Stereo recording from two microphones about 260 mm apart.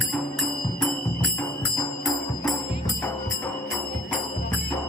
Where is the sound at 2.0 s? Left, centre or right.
Centre.